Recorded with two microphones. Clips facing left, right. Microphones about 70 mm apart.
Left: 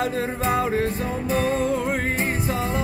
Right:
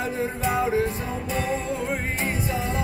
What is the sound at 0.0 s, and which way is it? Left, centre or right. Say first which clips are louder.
Music: left 2 dB; left.